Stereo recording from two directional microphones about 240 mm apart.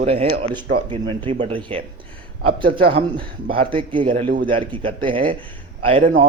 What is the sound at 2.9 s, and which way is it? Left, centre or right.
Speech, right.